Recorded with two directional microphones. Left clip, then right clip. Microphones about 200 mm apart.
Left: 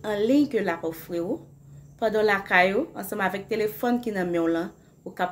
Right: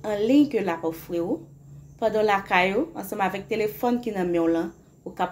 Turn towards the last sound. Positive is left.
turn(degrees=10)  # may be behind; listen again after turning